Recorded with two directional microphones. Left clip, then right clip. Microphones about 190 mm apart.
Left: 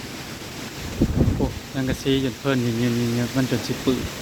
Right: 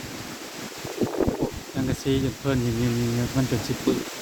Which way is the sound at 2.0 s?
10° right (ahead or behind).